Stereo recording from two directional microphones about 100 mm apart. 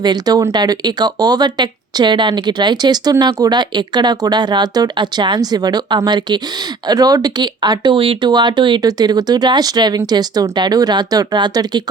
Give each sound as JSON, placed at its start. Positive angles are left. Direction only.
{"t": 0.0, "sound": "speech", "side_deg": -40}